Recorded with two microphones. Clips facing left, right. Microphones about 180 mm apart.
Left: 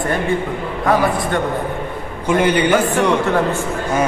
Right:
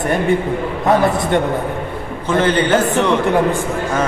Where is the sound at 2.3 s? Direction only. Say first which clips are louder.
Even; 10° left (ahead or behind).